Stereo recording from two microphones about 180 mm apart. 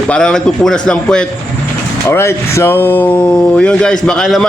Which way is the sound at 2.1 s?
15° left (ahead or behind).